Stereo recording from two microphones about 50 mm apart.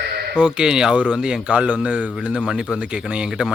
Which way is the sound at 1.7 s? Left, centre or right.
Right.